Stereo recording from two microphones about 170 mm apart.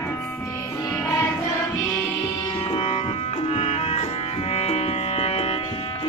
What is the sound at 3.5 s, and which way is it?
Music, 40° left (ahead or behind).